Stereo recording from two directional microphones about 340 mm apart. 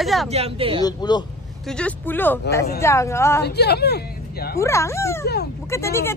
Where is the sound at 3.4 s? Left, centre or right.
Left.